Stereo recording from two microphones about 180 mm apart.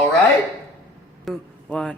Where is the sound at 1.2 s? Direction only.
5° left (ahead or behind).